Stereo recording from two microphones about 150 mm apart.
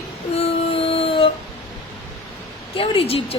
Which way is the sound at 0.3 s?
40° left (ahead or behind).